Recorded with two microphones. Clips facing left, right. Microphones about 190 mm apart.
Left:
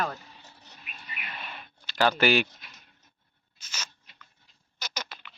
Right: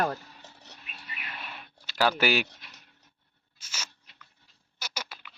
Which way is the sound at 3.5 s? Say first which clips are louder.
Left 1 dB; 10° right (ahead or behind).